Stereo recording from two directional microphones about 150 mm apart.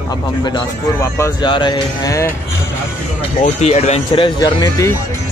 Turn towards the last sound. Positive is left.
turn(degrees=25)  # may be behind; listen again after turning